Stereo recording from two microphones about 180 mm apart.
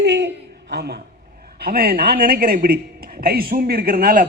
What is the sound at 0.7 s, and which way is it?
A man's voice, 65° right (ahead or behind).